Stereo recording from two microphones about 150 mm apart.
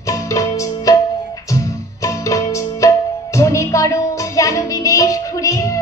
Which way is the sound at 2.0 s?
20° left (ahead or behind).